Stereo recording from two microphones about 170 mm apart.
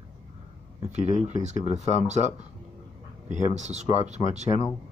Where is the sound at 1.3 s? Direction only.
45° right (ahead or behind).